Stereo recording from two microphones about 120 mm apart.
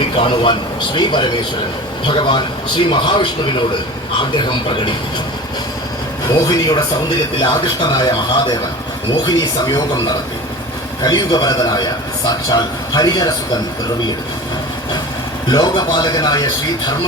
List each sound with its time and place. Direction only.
0.2 s a man's voice: 45° left (ahead or behind)
6.2 s a man's voice: 30° left (ahead or behind)
15.4 s a man's voice: 35° left (ahead or behind)